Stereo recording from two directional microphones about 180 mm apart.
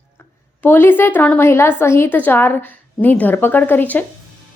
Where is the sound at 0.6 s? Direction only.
10° left (ahead or behind).